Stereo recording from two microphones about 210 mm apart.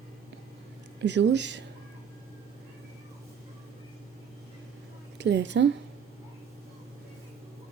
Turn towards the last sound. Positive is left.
turn(degrees=-55)  # may be behind; listen again after turning